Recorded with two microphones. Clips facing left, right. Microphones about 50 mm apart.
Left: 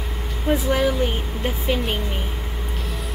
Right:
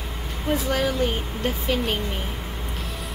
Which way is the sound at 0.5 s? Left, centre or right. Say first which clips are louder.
Left 3 dB; centre.